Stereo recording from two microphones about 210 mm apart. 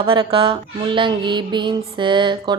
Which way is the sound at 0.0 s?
25° right (ahead or behind).